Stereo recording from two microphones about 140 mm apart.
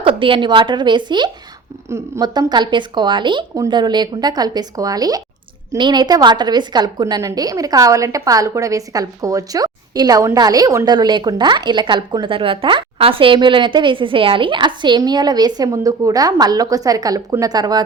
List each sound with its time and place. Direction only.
0.0 s a woman's voice: 40° right (ahead or behind)